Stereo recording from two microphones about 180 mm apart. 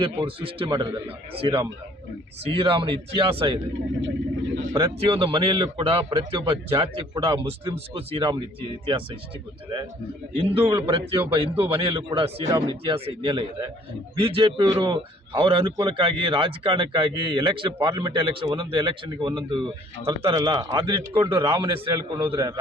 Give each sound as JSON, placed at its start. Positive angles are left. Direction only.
{"t": 0.0, "sound": "a man's voice", "side_deg": -30}
{"t": 4.7, "sound": "a man's voice", "side_deg": -25}
{"t": 10.3, "sound": "a man's voice", "side_deg": -30}